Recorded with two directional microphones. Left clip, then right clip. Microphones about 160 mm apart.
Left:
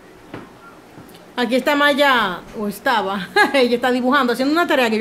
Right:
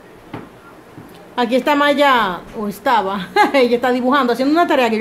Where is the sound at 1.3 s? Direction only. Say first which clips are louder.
Right 2 dB; 5° left (ahead or behind).